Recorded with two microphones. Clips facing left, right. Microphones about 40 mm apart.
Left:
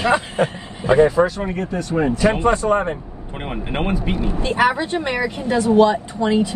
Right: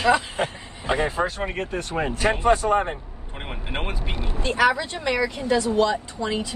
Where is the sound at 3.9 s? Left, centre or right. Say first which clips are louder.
Left 9 dB; left.